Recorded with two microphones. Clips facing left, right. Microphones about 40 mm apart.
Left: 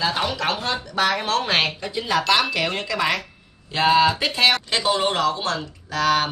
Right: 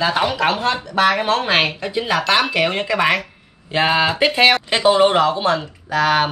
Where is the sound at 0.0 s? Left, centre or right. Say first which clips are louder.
Right 5 dB; right.